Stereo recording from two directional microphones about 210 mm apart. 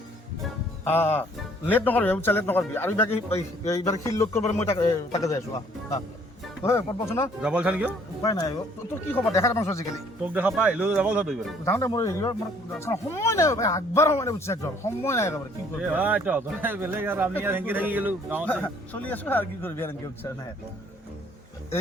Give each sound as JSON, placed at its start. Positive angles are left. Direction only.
{"t": 0.9, "sound": "speech", "side_deg": 10}
{"t": 7.4, "sound": "a man's voice", "side_deg": -5}
{"t": 8.2, "sound": "speech", "side_deg": 15}
{"t": 10.3, "sound": "speech", "side_deg": -5}
{"t": 11.6, "sound": "speech", "side_deg": 15}
{"t": 15.8, "sound": "a man's voice", "side_deg": -5}
{"t": 18.5, "sound": "speech", "side_deg": 5}